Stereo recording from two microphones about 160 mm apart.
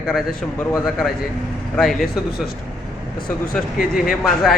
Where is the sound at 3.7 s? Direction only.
65° left (ahead or behind).